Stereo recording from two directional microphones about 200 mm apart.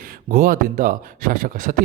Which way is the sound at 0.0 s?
45° right (ahead or behind).